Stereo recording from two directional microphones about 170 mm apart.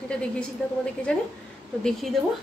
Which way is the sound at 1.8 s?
Centre (ahead or behind).